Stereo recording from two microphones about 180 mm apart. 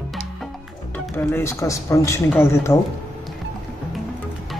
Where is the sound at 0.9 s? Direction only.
10° left (ahead or behind).